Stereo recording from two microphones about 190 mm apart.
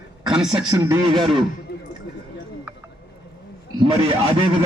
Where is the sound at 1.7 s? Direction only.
65° left (ahead or behind).